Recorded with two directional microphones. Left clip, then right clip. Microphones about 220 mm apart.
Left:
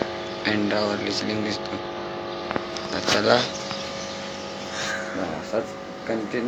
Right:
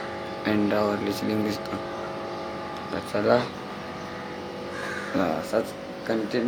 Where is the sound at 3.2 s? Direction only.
5° right (ahead or behind).